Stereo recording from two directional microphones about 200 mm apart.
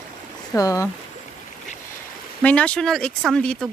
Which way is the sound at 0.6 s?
15° left (ahead or behind).